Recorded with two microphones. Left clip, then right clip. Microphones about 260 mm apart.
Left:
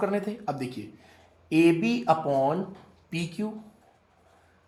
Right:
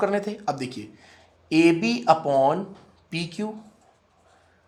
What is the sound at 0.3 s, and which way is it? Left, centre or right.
Speech, right.